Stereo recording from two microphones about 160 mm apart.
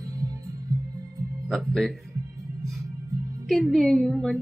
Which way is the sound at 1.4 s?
Centre (ahead or behind).